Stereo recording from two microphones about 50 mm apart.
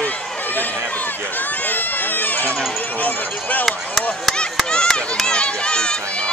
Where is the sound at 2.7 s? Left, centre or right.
Left.